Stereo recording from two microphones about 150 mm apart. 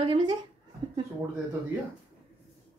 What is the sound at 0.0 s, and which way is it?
Speech, 30° right (ahead or behind).